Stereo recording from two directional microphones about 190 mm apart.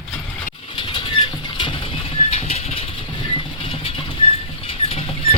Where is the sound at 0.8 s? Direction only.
25° left (ahead or behind).